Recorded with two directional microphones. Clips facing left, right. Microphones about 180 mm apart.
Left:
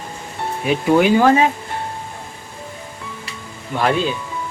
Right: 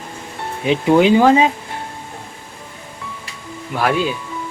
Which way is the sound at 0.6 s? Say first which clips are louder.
Right 2 dB; 20° right (ahead or behind).